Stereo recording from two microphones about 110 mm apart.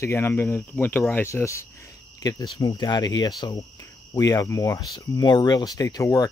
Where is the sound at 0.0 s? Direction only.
20° left (ahead or behind).